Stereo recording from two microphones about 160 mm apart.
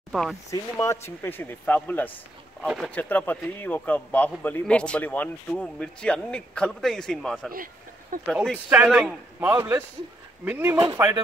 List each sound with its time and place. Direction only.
0.1 s speech: centre (ahead or behind)
0.5 s a man's voice: 20° left (ahead or behind)
7.5 s a sound: 60° right (ahead or behind)
8.3 s speech: centre (ahead or behind)
8.6 s a man's voice: 10° right (ahead or behind)